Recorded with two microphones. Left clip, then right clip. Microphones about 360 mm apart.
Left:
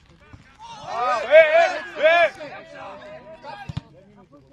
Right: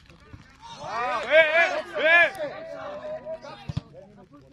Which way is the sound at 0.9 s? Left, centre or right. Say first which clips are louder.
Left 6 dB; left.